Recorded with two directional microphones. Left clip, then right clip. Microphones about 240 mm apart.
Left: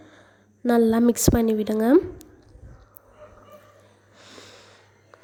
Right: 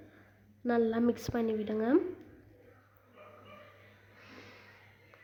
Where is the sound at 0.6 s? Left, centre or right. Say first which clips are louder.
Left 10 dB; left.